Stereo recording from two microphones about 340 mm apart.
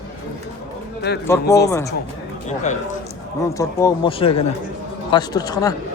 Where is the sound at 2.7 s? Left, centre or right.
Centre.